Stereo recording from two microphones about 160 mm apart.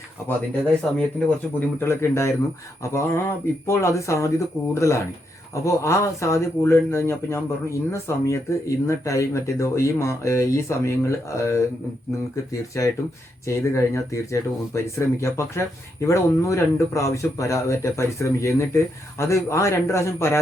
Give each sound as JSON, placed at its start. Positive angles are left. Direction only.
{"t": 1.5, "sound": "a man's voice", "side_deg": 15}
{"t": 13.5, "sound": "a man's voice", "side_deg": 20}